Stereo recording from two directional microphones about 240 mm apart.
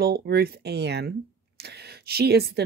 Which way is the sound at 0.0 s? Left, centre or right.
Right.